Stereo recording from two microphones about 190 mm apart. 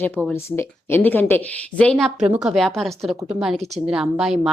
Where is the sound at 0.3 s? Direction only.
10° left (ahead or behind).